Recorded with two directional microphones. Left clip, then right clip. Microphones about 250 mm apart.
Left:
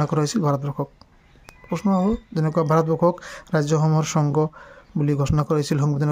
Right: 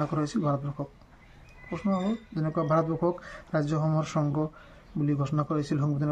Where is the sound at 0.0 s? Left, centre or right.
Left.